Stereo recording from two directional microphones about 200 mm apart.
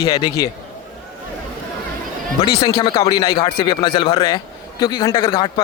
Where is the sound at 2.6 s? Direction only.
25° left (ahead or behind).